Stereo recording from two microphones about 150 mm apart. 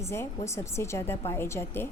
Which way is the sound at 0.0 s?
20° left (ahead or behind).